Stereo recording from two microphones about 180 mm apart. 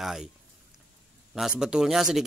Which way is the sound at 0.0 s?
Centre (ahead or behind).